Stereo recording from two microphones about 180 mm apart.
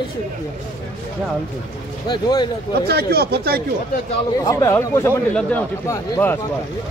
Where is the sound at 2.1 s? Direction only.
20° left (ahead or behind).